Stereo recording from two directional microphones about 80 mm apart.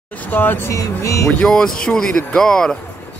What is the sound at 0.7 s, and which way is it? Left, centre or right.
Speech, left.